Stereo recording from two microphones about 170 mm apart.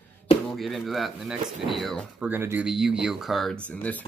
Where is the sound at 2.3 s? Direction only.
10° right (ahead or behind); by 4.1 s 10° left (ahead or behind).